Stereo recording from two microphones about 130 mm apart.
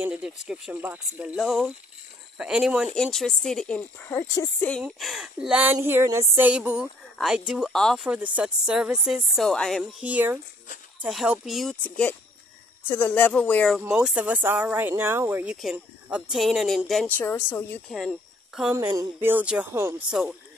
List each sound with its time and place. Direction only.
0.0 s speech: 10° right (ahead or behind); by 4.2 s 10° left (ahead or behind)
4.2 s a woman's voice: 25° left (ahead or behind)
4.9 s speech: centre (ahead or behind)
8.1 s speech: 10° right (ahead or behind)
10.0 s speech: 15° right (ahead or behind)
11.7 s speech: 10° left (ahead or behind)
13.7 s speech: 5° right (ahead or behind)
15.5 s speech: 5° right (ahead or behind)
17.2 s speech: 15° left (ahead or behind)
17.8 s speech: centre (ahead or behind)
18.7 s a woman's voice: 20° right (ahead or behind)
19.2 s speech: 10° right (ahead or behind)
19.7 s a woman's voice: 20° right (ahead or behind)
20.1 s speech: 5° right (ahead or behind)